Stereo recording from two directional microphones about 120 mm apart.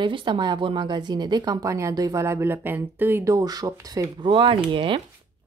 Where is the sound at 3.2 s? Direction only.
30° right (ahead or behind).